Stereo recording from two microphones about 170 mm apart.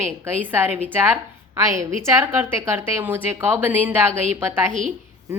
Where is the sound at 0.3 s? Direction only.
10° right (ahead or behind).